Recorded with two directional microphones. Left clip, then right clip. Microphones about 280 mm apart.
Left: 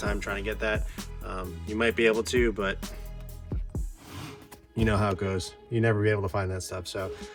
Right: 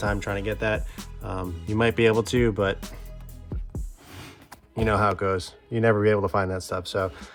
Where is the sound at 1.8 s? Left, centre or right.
Right.